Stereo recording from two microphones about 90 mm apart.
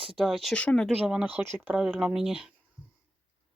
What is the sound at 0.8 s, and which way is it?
Speech, 10° right (ahead or behind).